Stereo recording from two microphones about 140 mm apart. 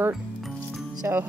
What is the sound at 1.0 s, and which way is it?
Music, 15° right (ahead or behind).